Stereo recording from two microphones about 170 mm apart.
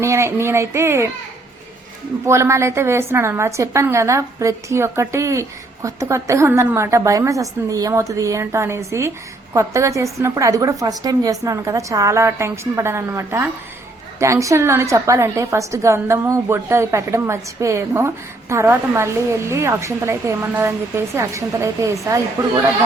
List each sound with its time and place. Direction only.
0.0 s a woman's voice: 15° right (ahead or behind)
2.2 s a woman's voice: 15° right (ahead or behind)